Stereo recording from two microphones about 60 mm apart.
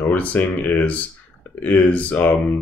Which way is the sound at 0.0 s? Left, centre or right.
Left.